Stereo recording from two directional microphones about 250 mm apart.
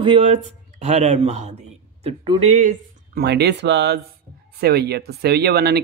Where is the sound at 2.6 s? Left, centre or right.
Right.